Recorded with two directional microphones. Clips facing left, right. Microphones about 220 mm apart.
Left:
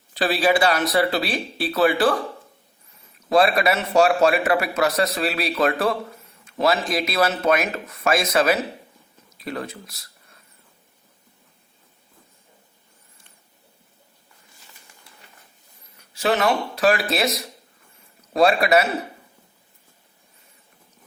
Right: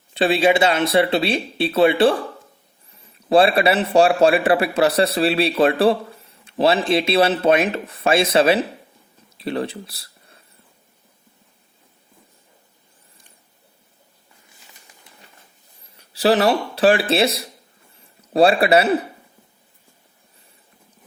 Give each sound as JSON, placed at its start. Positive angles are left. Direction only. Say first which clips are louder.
{"t": 0.1, "sound": "speech", "louder": "right 3 dB", "side_deg": -25}
{"t": 3.2, "sound": "speech", "louder": "right 3 dB", "side_deg": -30}
{"t": 16.0, "sound": "speech", "louder": "right 5 dB", "side_deg": -35}